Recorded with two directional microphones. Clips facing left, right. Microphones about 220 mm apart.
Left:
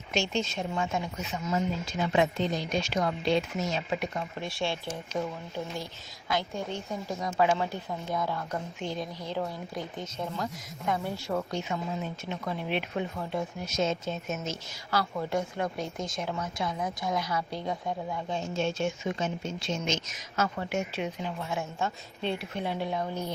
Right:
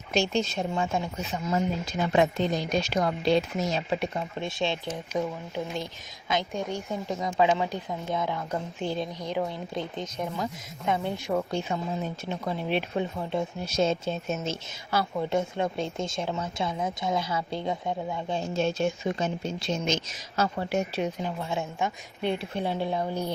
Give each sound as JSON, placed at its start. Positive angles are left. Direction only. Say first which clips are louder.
{"t": 0.1, "sound": "speech", "louder": "right 4 dB", "side_deg": -35}
{"t": 6.2, "sound": "a woman's voice", "louder": "right 2 dB", "side_deg": -20}
{"t": 8.8, "sound": "speech", "louder": "right 5 dB", "side_deg": -30}
{"t": 9.2, "sound": "speech", "louder": "right 3 dB", "side_deg": -15}
{"t": 11.5, "sound": "a woman's voice", "louder": "right 3 dB", "side_deg": -35}
{"t": 21.5, "sound": "speech", "louder": "right 1 dB", "side_deg": -15}
{"t": 22.4, "sound": "a woman's voice", "louder": "right 3 dB", "side_deg": -30}